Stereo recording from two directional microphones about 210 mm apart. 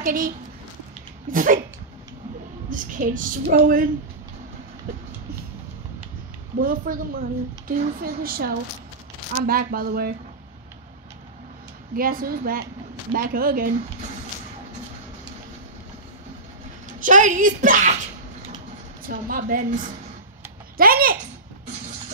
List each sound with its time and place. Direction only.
0.0 s a woman's voice: 40° right (ahead or behind)
2.7 s a woman's voice: 40° right (ahead or behind)
6.6 s a woman's voice: 40° right (ahead or behind)
11.9 s a woman's voice: 45° right (ahead or behind)
17.0 s a woman's voice: 35° right (ahead or behind)
19.0 s a woman's voice: 40° right (ahead or behind)
20.7 s a sound: 45° right (ahead or behind)